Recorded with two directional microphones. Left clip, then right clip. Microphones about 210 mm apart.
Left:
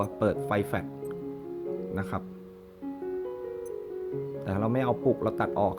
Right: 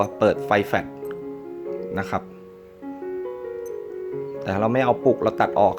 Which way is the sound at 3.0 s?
40° left (ahead or behind).